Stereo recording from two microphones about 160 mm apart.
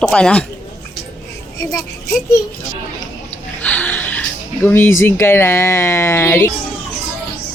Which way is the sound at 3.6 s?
10° left (ahead or behind).